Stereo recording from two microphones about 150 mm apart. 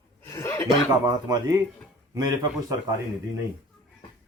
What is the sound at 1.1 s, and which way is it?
A man's voice, 25° right (ahead or behind).